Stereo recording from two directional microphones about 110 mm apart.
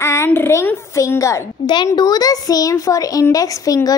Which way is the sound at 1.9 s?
35° left (ahead or behind).